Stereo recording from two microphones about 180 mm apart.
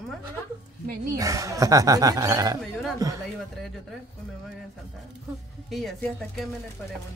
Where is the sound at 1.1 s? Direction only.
20° right (ahead or behind).